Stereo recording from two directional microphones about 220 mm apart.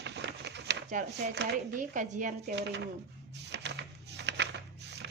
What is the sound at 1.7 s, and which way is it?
Speech, 35° right (ahead or behind).